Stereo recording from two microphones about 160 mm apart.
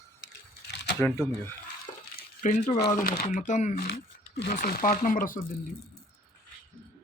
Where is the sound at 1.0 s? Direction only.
15° left (ahead or behind).